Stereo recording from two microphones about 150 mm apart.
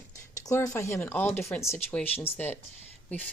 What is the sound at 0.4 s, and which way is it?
Speech, 25° left (ahead or behind).